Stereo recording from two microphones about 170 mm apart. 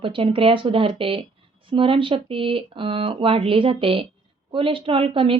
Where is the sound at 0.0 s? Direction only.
30° right (ahead or behind).